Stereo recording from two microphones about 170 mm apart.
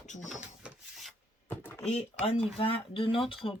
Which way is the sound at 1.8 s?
35° left (ahead or behind).